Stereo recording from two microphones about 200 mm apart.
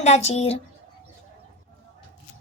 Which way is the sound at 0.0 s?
35° left (ahead or behind).